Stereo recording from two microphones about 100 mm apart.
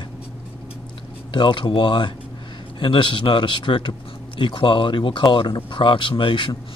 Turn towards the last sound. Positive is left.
turn(degrees=55)  # may be behind; listen again after turning